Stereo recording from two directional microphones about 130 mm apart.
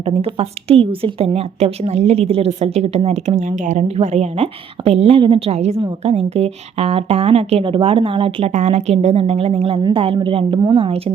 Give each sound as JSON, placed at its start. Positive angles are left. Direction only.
{"t": 0.0, "sound": "a woman's voice", "side_deg": -45}
{"t": 8.5, "sound": "a woman's voice", "side_deg": -60}